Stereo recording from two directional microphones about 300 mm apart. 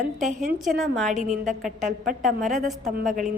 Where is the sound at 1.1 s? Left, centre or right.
Right.